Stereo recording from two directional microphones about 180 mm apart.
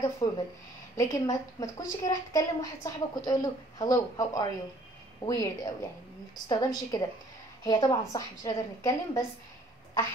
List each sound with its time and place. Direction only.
0.2 s a woman's voice: 20° left (ahead or behind)